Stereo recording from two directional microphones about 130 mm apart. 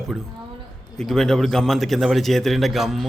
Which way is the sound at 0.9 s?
5° left (ahead or behind).